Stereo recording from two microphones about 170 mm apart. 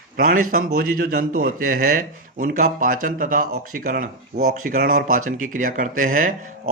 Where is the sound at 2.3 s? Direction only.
45° right (ahead or behind).